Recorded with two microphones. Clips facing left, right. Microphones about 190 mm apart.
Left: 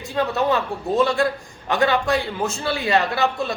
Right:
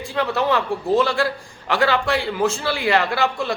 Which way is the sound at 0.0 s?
20° left (ahead or behind).